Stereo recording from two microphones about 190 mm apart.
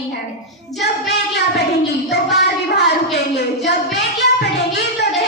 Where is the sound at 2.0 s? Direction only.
60° left (ahead or behind).